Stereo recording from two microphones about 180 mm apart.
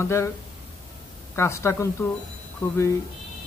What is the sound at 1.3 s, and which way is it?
Speech, 15° left (ahead or behind).